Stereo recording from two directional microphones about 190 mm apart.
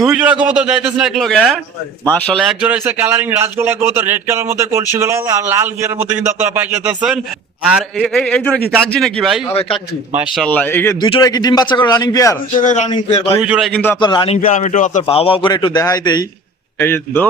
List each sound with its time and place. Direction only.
0.0 s a man's voice: 5° right (ahead or behind)
7.8 s a man's voice: 5° left (ahead or behind)
10.1 s a man's voice: 10° right (ahead or behind)
10.4 s speech: 10° left (ahead or behind)
11.0 s a man's voice: 20° left (ahead or behind)
12.5 s a man's voice: 40° left (ahead or behind)
13.4 s a man's voice: 5° right (ahead or behind)
14.0 s a man's voice: 25° left (ahead or behind)
14.4 s a man's voice: 40° left (ahead or behind); by 17.2 s 10° left (ahead or behind)